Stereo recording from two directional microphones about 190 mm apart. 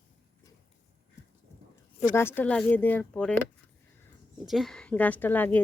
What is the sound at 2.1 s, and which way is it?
Speech, 10° left (ahead or behind).